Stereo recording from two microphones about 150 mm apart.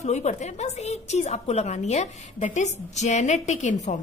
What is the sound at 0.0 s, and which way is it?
A woman's voice, 50° left (ahead or behind).